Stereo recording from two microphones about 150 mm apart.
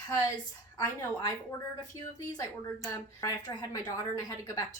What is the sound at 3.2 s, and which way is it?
A woman's voice, 25° left (ahead or behind).